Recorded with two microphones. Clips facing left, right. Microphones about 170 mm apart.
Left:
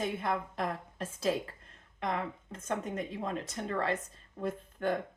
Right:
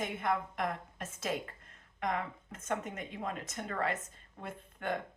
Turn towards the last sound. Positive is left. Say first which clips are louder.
# left 5 dB
turn(degrees=35)  # may be behind; listen again after turning